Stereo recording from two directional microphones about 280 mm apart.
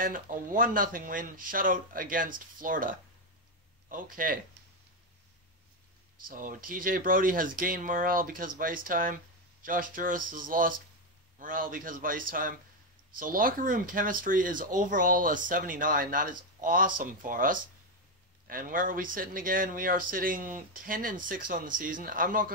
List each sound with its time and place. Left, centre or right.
0.0 s speech: right
6.2 s speech: right